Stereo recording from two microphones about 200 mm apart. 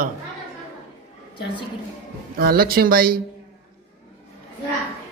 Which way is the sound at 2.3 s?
45° right (ahead or behind).